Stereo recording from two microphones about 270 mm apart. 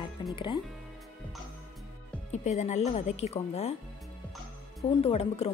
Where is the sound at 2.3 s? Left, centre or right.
Left.